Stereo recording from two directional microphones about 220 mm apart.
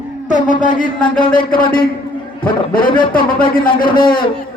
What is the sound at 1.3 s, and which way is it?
A man's voice, 40° left (ahead or behind).